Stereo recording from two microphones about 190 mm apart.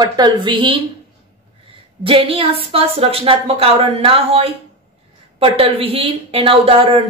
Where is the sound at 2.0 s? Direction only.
30° right (ahead or behind).